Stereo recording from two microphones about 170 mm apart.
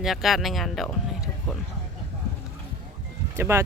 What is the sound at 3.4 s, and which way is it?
Speech, 15° right (ahead or behind).